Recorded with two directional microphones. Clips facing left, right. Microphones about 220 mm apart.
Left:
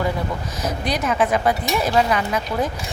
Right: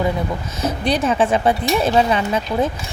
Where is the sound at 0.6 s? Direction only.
30° right (ahead or behind).